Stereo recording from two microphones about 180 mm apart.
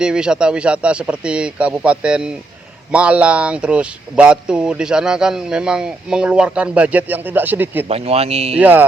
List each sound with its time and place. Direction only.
0.0 s speech: 5° right (ahead or behind)
7.9 s speech: 35° right (ahead or behind)
8.5 s speech: 10° right (ahead or behind)